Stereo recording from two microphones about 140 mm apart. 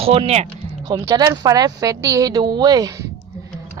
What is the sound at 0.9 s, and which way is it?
A woman's voice, 30° right (ahead or behind).